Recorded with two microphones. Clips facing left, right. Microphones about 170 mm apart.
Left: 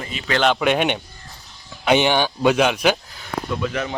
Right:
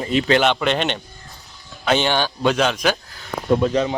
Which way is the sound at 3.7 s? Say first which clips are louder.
Right 6 dB; 25° right (ahead or behind).